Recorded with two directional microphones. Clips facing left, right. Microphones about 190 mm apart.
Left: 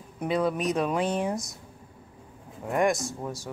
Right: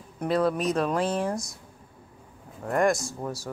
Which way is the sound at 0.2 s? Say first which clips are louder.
Right 2 dB; 5° left (ahead or behind).